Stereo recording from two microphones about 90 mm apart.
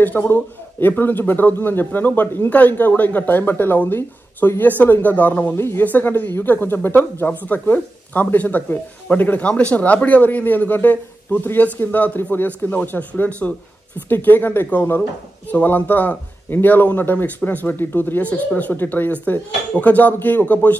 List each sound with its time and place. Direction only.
0.0 s speech: 20° left (ahead or behind)